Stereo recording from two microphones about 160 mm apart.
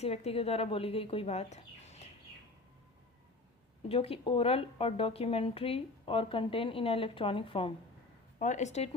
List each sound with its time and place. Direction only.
0.0 s speech: 40° left (ahead or behind)
3.8 s speech: 35° left (ahead or behind)
8.4 s speech: 50° left (ahead or behind)